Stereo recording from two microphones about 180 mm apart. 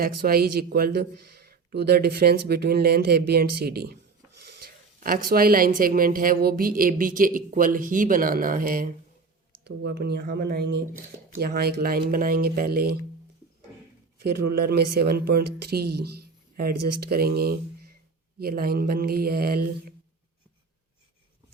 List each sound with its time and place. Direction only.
0.0 s a man's voice: 55° right (ahead or behind)
9.6 s a man's voice: 65° right (ahead or behind)
14.2 s a man's voice: 60° right (ahead or behind)